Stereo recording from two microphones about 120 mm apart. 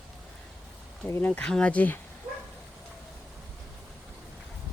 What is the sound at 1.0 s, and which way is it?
Speech, 20° left (ahead or behind).